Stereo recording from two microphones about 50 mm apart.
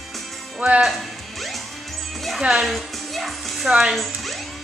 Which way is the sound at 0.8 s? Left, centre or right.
Centre.